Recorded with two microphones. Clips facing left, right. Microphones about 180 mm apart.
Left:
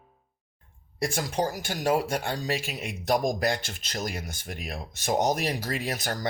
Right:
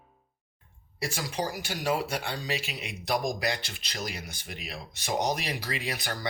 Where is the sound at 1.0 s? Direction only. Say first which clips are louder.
Left 5 dB; 50° left (ahead or behind).